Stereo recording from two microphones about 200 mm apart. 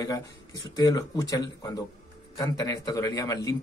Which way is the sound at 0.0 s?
15° left (ahead or behind).